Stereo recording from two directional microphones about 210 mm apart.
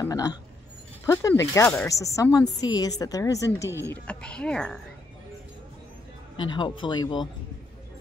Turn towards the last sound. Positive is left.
turn(degrees=20)  # may be behind; listen again after turning